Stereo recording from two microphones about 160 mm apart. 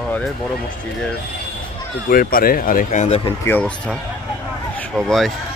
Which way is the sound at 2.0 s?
65° left (ahead or behind).